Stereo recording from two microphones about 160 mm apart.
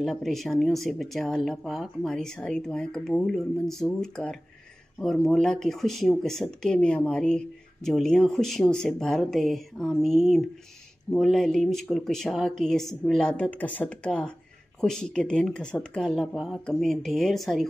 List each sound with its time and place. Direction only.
0.0 s speech: centre (ahead or behind)